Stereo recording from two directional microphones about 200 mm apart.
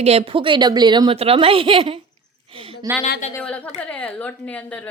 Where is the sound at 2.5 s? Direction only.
25° right (ahead or behind).